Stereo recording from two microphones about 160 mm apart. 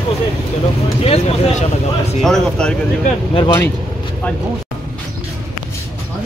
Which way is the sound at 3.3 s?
30° left (ahead or behind).